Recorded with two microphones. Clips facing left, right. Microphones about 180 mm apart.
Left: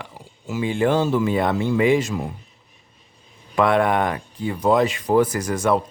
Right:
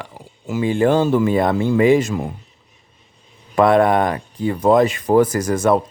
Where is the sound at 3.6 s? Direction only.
40° right (ahead or behind).